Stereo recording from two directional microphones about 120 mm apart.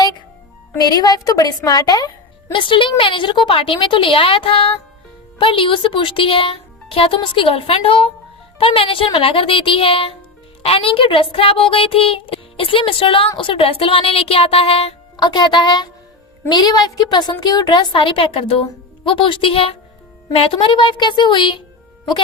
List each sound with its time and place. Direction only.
0.8 s a woman's voice: 30° left (ahead or behind)
2.5 s speech: 45° left (ahead or behind)
15.1 s a woman's voice: 35° left (ahead or behind)